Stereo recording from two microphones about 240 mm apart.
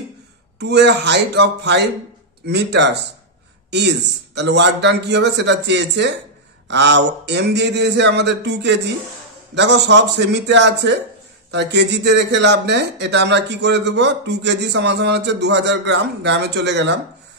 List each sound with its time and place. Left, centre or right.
0.6 s speech: right